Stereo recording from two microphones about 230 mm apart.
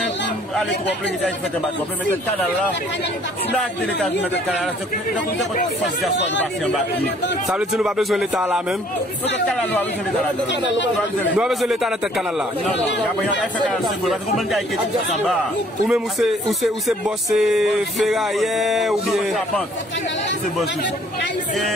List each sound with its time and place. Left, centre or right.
3.5 s music: centre
6.6 s music: centre
10.5 s a man's voice: left
11.3 s music: centre
13.0 s music: centre
15.9 s music: centre